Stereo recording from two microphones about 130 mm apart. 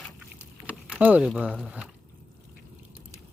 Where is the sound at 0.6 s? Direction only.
10° right (ahead or behind).